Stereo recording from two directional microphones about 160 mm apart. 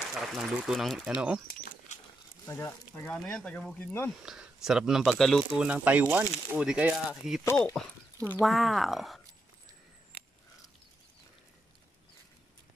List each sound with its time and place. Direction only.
0.1 s speech: centre (ahead or behind)
2.4 s speech: 20° left (ahead or behind)
2.9 s speech: 10° left (ahead or behind)
4.1 s speech: 5° right (ahead or behind)
5.7 s speech: 10° right (ahead or behind)